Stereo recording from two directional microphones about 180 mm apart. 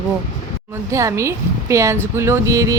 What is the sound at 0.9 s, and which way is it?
Speech, 15° right (ahead or behind).